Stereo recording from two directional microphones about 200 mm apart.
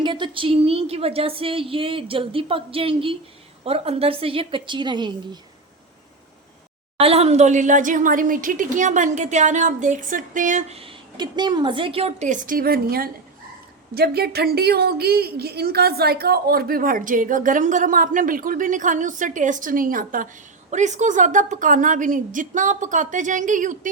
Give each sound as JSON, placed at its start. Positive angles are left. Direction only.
{"t": 0.0, "sound": "a woman's voice", "side_deg": -25}
{"t": 7.0, "sound": "a woman's voice", "side_deg": -30}